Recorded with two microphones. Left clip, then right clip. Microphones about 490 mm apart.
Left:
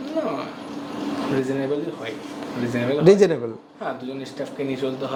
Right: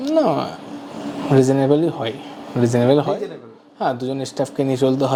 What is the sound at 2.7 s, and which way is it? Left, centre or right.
Speech, right.